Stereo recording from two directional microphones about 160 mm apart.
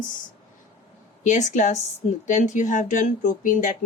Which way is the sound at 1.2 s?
50° left (ahead or behind).